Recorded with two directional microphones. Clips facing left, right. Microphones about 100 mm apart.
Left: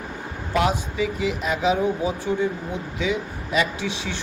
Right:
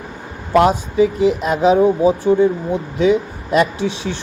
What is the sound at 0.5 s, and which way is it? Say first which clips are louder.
Speech: right 9 dB; 45° right (ahead or behind).